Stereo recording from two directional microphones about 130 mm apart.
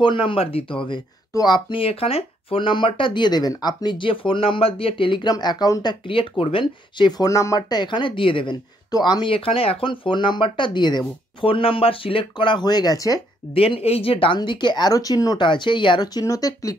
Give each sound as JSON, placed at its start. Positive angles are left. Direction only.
{"t": 0.0, "sound": "speech", "side_deg": 40}
{"t": 1.3, "sound": "speech", "side_deg": 35}
{"t": 13.5, "sound": "speech", "side_deg": 45}